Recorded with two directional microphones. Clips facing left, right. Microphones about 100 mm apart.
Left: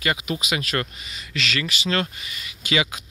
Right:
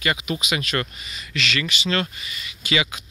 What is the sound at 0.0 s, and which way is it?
Speech, 30° left (ahead or behind).